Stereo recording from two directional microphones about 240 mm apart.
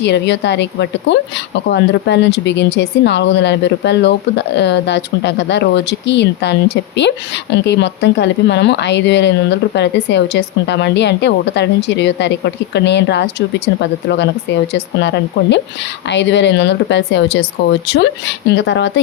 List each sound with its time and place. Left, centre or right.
0.0 s speech: left